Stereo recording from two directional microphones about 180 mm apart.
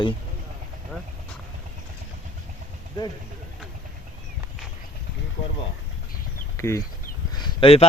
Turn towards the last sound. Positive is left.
turn(degrees=30)  # may be behind; listen again after turning